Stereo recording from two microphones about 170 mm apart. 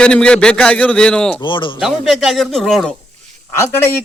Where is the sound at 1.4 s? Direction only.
30° left (ahead or behind).